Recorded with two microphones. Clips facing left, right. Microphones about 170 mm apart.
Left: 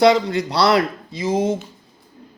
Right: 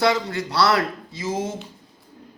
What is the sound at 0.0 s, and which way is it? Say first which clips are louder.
A man's voice: left 6 dB; 20° left (ahead or behind).